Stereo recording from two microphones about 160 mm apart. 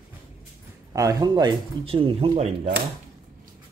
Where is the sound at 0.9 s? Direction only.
20° right (ahead or behind).